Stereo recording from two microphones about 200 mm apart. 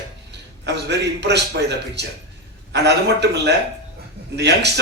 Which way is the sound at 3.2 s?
55° right (ahead or behind).